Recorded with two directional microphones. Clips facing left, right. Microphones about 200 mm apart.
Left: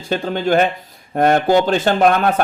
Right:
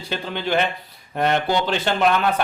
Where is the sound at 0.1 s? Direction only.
45° left (ahead or behind).